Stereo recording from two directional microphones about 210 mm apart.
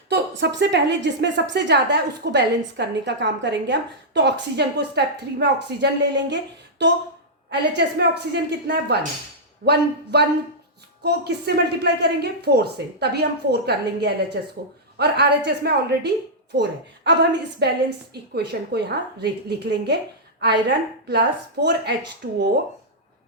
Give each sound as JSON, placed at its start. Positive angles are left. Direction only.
{"t": 0.1, "sound": "a woman's voice", "side_deg": -55}
{"t": 6.3, "sound": "a sound", "side_deg": -55}
{"t": 7.5, "sound": "a woman's voice", "side_deg": -50}